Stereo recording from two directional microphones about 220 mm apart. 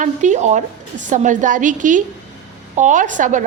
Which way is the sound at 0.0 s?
35° right (ahead or behind).